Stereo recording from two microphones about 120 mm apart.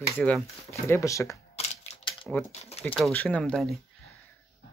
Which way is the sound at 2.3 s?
5° left (ahead or behind).